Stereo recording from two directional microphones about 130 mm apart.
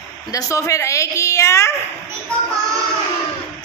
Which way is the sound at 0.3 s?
25° left (ahead or behind).